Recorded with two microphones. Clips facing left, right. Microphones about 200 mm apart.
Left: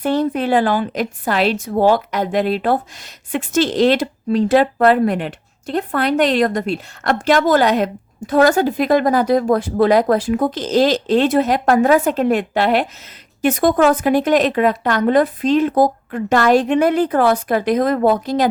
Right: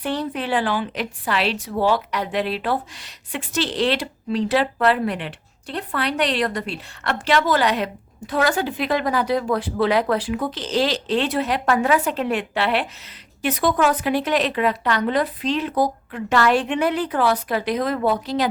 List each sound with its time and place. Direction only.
0.0 s a woman's voice: 45° left (ahead or behind)